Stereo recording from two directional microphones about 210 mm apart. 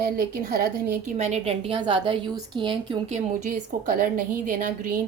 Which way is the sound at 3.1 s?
40° right (ahead or behind).